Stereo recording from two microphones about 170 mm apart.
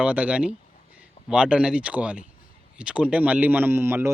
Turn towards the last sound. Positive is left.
turn(degrees=-15)  # may be behind; listen again after turning